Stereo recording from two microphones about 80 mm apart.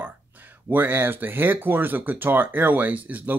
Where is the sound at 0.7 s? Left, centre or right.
Right.